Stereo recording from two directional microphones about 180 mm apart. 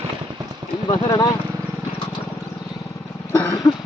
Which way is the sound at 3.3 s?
15° left (ahead or behind).